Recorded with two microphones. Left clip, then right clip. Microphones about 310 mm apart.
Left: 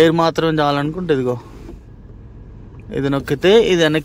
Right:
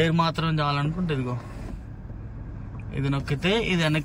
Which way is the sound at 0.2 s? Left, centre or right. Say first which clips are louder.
Left 10 dB; centre.